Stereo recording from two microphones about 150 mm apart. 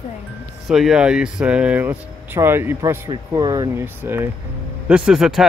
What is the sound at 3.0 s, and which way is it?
Speech, 25° right (ahead or behind).